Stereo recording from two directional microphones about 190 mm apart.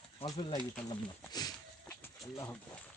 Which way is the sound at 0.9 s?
20° left (ahead or behind).